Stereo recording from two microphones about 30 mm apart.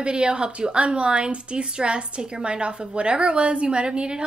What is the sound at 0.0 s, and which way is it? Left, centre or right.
A woman's voice, right.